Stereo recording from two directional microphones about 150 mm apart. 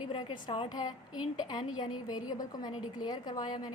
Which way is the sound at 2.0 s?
25° left (ahead or behind).